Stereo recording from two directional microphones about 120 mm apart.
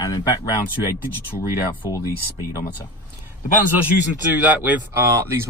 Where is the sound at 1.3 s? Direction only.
15° left (ahead or behind).